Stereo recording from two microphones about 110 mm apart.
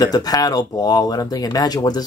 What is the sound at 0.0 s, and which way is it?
Speech, 35° left (ahead or behind).